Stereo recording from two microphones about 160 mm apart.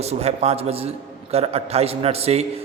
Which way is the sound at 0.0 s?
40° right (ahead or behind).